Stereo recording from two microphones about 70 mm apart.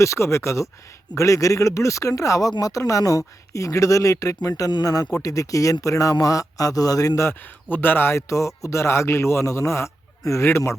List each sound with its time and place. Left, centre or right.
0.0 s speech: left
7.2 s a man's voice: left
8.3 s a man's voice: left